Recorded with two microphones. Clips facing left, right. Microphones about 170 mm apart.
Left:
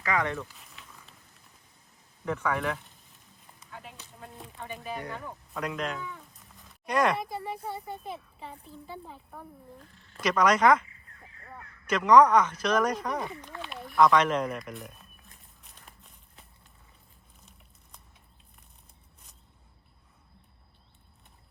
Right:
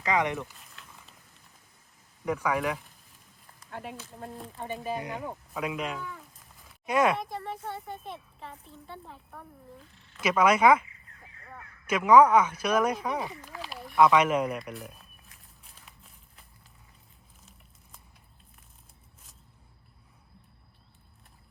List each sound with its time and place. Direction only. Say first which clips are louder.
0.0 s speech: right 2 dB; 20° right (ahead or behind)
0.5 s a sound: even; centre (ahead or behind)
2.2 s speech: right 1 dB; 10° right (ahead or behind)
3.7 s speech: right 7 dB; 60° right (ahead or behind)
4.5 s speech: right 4 dB; 30° right (ahead or behind)
5.0 s speech: right 3 dB; 15° right (ahead or behind)
11.9 s speech: even; 10° right (ahead or behind)
16.0 s a sound: left 1 dB; centre (ahead or behind)